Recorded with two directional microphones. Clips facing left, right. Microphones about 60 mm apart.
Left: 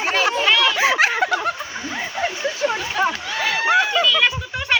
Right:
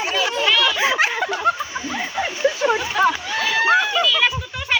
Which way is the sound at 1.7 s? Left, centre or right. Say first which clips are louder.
Right 2 dB; centre.